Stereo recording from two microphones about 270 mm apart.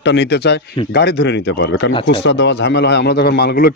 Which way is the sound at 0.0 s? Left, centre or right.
Left.